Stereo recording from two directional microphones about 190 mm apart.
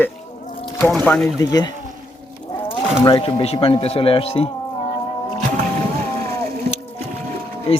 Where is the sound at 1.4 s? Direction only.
20° left (ahead or behind).